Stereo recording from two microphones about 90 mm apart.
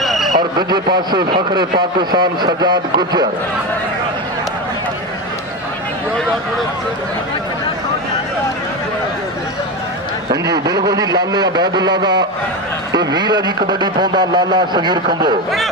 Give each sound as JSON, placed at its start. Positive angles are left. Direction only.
{"t": 0.0, "sound": "a sound", "side_deg": 0}
{"t": 0.4, "sound": "a man's voice", "side_deg": -50}
{"t": 10.3, "sound": "a man's voice", "side_deg": -45}